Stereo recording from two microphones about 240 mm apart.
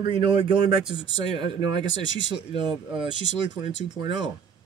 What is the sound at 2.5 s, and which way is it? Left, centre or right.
Speech, right.